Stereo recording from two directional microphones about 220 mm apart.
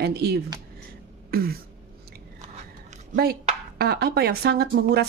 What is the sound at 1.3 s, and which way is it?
Throat clearing, 45° right (ahead or behind).